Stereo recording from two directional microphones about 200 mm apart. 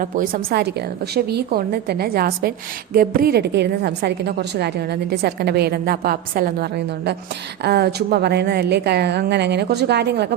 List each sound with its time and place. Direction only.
0.0 s a woman's voice: 45° right (ahead or behind)